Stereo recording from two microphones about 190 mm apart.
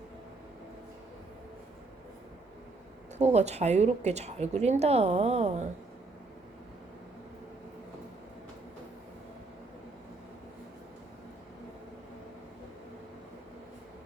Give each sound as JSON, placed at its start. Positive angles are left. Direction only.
{"t": 3.2, "sound": "a woman's voice", "side_deg": -35}